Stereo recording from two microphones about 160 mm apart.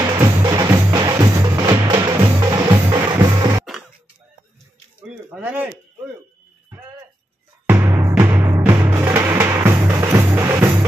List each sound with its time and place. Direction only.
0.2 s music: 25° right (ahead or behind)
5.0 s a sound: 5° right (ahead or behind)
7.6 s timpani: 20° right (ahead or behind)
8.2 s music: 15° right (ahead or behind)